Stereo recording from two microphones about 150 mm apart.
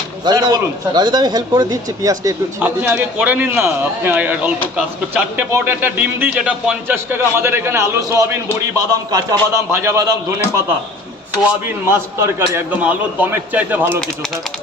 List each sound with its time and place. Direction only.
0.3 s speech: 25° right (ahead or behind)
2.6 s a man's voice: 10° right (ahead or behind)
11.9 s a man's voice: 15° right (ahead or behind)